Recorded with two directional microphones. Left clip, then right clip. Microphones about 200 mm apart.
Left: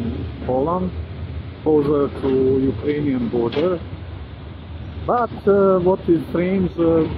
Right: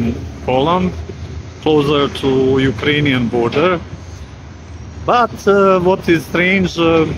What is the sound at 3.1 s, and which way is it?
Speech, 20° right (ahead or behind).